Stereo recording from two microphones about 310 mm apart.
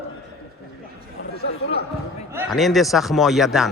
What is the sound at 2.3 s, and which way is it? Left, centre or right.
A man's voice, centre.